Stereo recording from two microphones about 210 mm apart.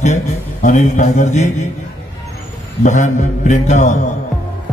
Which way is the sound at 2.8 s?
35° left (ahead or behind).